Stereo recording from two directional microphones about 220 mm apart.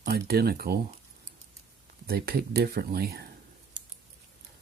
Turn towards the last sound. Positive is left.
turn(degrees=-45)  # may be behind; listen again after turning